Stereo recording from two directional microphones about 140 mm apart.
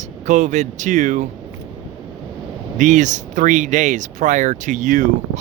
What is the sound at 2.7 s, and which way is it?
Speech, 60° right (ahead or behind).